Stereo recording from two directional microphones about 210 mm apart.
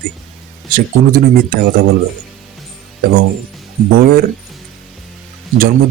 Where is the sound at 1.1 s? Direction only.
45° right (ahead or behind).